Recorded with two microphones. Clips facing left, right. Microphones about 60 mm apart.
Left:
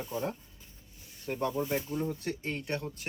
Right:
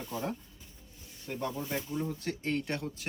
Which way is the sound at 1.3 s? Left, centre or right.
Centre.